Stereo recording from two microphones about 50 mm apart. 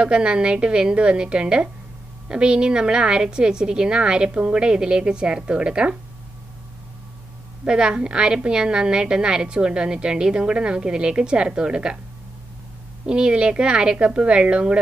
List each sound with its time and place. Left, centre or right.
0.0 s a woman's voice: centre
7.6 s a woman's voice: centre
13.0 s a woman's voice: centre